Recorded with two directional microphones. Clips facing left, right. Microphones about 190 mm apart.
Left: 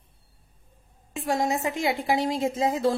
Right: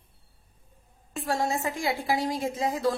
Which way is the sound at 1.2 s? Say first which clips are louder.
Left 3 dB; 20° left (ahead or behind).